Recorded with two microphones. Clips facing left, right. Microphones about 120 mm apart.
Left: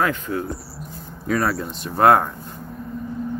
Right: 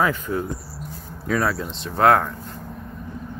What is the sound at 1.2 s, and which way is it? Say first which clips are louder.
Speech: left 1 dB; 5° left (ahead or behind).